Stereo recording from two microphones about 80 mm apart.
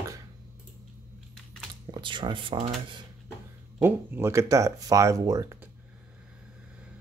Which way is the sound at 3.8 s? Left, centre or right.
Right.